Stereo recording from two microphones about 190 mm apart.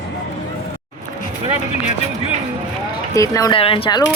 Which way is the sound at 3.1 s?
20° left (ahead or behind).